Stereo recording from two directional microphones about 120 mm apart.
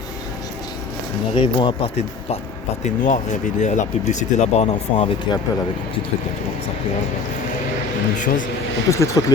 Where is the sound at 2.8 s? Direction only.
90° left; by 5.1 s 65° left (ahead or behind).